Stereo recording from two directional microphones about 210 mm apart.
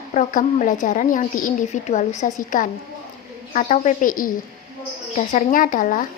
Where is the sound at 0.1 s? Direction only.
35° left (ahead or behind).